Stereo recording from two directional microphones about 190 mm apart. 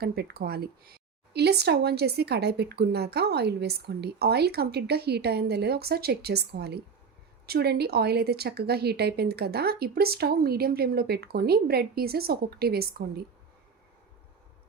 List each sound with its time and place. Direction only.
0.0 s speech: 55° right (ahead or behind)